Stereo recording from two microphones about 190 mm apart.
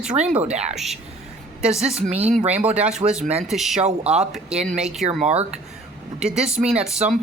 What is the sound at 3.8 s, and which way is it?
Speech, 35° right (ahead or behind).